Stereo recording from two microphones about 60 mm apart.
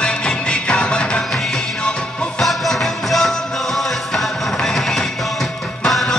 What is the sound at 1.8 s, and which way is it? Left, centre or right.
Music, centre.